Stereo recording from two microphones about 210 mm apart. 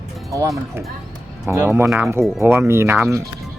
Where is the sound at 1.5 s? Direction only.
10° right (ahead or behind).